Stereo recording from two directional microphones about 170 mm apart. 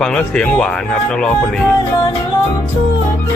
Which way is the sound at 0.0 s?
5° left (ahead or behind).